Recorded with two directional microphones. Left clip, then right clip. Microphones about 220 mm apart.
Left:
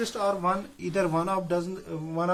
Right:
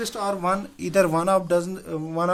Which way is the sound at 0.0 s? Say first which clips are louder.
Right 1 dB; 45° right (ahead or behind).